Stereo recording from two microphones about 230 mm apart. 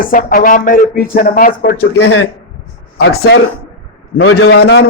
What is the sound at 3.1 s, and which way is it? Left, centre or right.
Speech, left.